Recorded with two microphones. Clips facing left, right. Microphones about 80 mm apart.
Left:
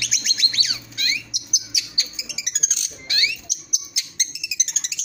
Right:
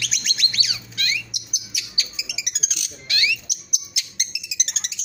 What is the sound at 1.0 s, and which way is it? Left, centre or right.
Bird, left.